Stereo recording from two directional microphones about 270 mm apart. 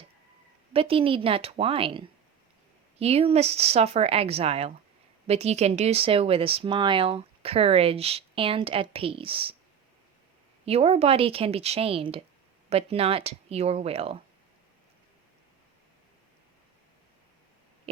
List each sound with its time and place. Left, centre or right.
0.7 s speech: right
10.7 s speech: right